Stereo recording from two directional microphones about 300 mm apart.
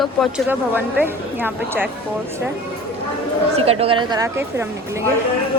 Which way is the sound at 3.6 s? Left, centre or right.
Centre.